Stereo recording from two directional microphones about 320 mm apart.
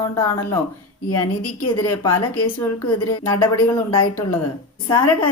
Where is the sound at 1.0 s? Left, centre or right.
Left.